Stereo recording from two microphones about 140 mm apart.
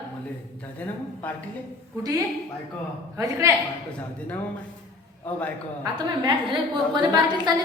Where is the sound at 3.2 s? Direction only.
20° right (ahead or behind).